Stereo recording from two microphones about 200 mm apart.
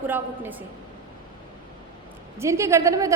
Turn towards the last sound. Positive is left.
turn(degrees=-15)  # may be behind; listen again after turning